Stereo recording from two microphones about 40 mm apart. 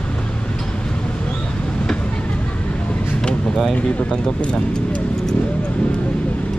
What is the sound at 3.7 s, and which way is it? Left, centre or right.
Speech, left.